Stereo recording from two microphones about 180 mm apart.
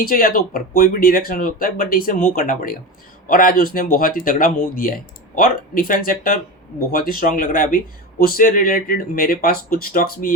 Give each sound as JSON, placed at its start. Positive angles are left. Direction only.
{"t": 0.0, "sound": "speech", "side_deg": 55}